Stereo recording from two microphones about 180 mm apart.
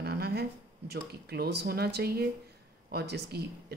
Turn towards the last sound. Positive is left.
turn(degrees=-65)  # may be behind; listen again after turning